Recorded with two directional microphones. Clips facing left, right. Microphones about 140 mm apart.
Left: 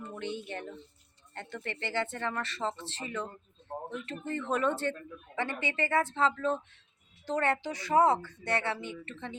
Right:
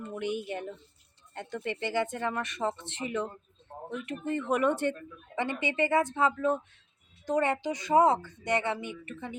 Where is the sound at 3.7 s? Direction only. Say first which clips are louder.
Left 4 dB; 45° left (ahead or behind).